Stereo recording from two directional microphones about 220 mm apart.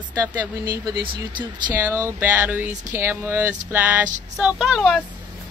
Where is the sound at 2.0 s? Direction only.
10° right (ahead or behind).